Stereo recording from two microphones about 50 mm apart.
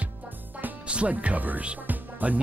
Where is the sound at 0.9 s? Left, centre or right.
Right.